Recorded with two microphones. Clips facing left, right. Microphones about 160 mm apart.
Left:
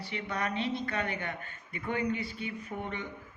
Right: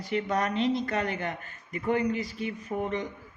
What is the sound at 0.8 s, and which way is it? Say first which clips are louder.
Speech: right 4 dB; 40° right (ahead or behind).